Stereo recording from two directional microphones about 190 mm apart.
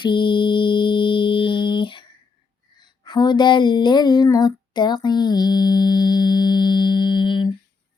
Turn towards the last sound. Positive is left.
turn(degrees=25)  # may be behind; listen again after turning